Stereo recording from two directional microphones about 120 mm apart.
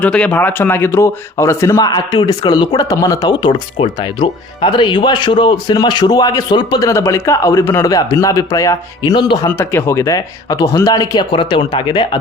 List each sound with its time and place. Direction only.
0.0 s speech: 10° left (ahead or behind); by 9.4 s 40° left (ahead or behind)
9.5 s speech: 20° left (ahead or behind); by 12.2 s 40° left (ahead or behind)